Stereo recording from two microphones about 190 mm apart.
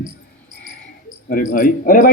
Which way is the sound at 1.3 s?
45° left (ahead or behind).